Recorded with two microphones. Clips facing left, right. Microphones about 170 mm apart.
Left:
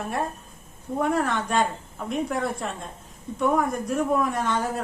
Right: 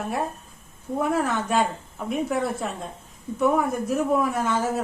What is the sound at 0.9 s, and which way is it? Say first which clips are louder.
A woman's voice: even; 5° right (ahead or behind).